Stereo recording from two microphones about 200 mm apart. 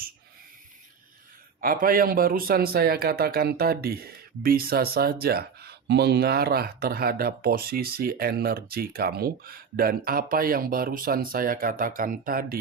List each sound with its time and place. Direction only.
1.6 s speech: 45° right (ahead or behind)